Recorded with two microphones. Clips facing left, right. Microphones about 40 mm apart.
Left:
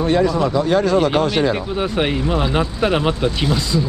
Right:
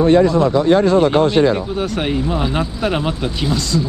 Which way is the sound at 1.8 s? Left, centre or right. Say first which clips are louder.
Even; centre.